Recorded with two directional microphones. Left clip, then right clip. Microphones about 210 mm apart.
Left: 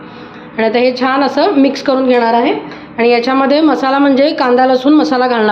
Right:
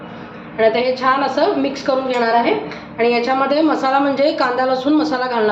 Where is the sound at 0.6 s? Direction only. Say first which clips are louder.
Left 4 dB; 55° left (ahead or behind).